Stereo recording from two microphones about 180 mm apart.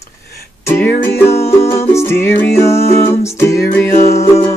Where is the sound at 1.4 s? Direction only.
35° left (ahead or behind).